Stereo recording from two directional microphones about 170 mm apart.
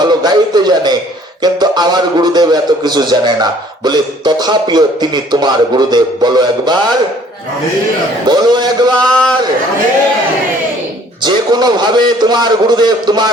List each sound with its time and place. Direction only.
0.0 s a man's voice: 25° right (ahead or behind)
8.3 s a man's voice: 25° right (ahead or behind)
9.1 s a man's voice: 5° left (ahead or behind)
11.2 s a man's voice: 25° right (ahead or behind)